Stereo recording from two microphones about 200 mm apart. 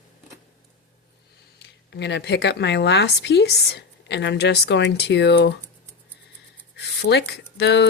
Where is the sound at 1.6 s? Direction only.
60° left (ahead or behind).